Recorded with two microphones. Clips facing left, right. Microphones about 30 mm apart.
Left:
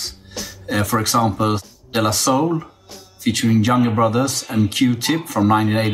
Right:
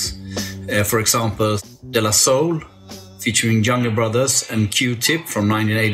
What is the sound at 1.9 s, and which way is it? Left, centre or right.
Speech, right.